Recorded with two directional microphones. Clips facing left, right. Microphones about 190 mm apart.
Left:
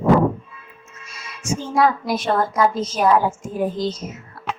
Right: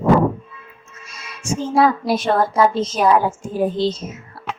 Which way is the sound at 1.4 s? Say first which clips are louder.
Right 2 dB; 30° right (ahead or behind).